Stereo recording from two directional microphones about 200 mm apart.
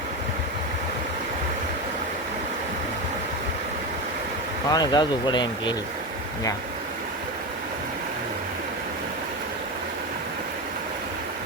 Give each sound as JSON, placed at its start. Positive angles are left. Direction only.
{"t": 4.7, "sound": "speech", "side_deg": 20}